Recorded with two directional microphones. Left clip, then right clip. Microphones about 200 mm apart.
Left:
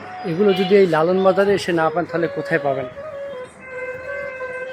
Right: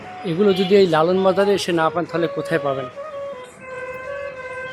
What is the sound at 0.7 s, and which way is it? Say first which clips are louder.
Speech: even; 5° right (ahead or behind).